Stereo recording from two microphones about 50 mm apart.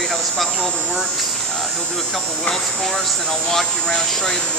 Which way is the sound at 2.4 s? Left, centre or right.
Centre.